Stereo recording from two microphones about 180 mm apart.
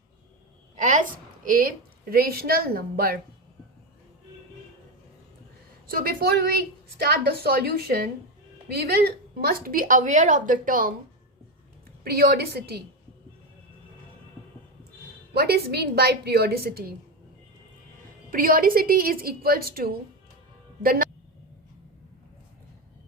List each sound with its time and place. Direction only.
0.8 s a woman's voice: 45° right (ahead or behind)
5.9 s a woman's voice: 55° right (ahead or behind)
12.0 s a woman's voice: 60° right (ahead or behind)
15.3 s a woman's voice: 60° right (ahead or behind)
18.3 s a woman's voice: 50° right (ahead or behind)